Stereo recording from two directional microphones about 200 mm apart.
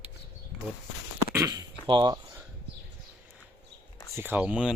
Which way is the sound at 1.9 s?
20° right (ahead or behind).